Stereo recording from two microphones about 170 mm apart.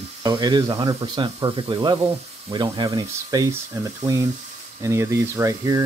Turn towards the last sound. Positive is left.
turn(degrees=-20)  # may be behind; listen again after turning